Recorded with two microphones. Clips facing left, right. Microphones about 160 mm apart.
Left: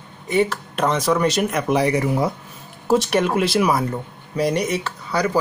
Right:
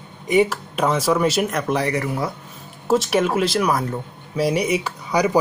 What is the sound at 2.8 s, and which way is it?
Speech, centre (ahead or behind).